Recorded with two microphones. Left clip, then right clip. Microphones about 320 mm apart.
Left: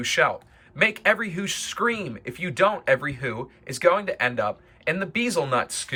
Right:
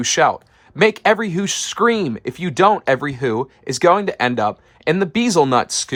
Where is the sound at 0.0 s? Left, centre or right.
Centre.